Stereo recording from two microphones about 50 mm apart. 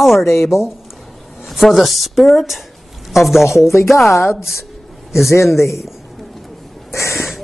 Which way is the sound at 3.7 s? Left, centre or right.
Left.